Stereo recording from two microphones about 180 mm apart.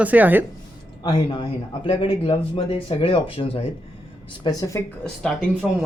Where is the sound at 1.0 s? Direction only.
25° left (ahead or behind).